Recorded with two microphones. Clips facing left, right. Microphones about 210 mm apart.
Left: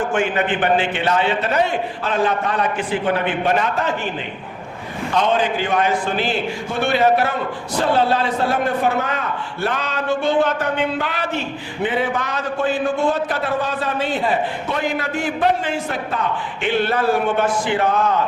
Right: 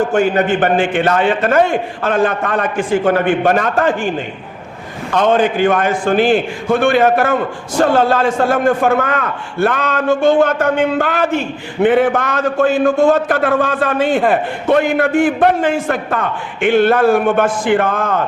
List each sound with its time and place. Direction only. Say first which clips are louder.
0.0 s a man's voice: right 6 dB; 40° right (ahead or behind)
5.1 s a man's voice: right 6 dB; 50° right (ahead or behind)